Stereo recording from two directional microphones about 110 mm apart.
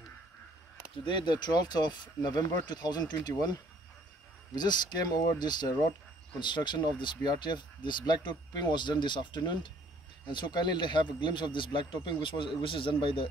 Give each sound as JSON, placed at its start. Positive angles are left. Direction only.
{"t": 1.0, "sound": "speech", "side_deg": 45}
{"t": 4.6, "sound": "speech", "side_deg": 40}